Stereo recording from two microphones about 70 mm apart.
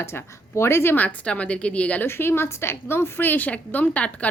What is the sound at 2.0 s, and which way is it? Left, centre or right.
A woman's voice, left.